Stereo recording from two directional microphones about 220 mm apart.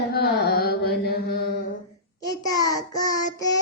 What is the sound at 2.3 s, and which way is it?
Speech, 15° left (ahead or behind).